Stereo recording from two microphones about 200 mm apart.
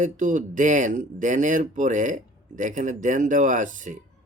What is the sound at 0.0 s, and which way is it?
Speech, 40° right (ahead or behind).